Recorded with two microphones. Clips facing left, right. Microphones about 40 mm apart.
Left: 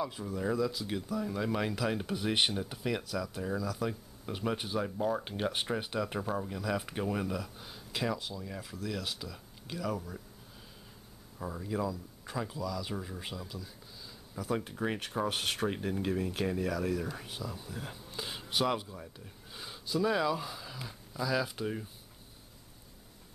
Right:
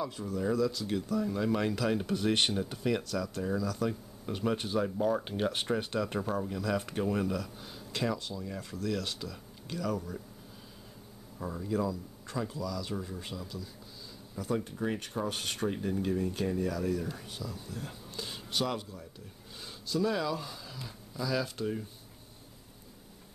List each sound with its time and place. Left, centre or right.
0.0 s speech: centre
11.3 s speech: centre
14.6 s speech: left